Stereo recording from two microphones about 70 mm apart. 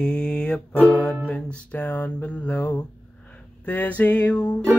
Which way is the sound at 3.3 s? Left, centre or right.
Left.